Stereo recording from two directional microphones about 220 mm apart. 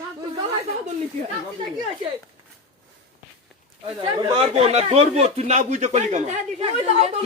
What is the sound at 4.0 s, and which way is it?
Speech, 20° right (ahead or behind).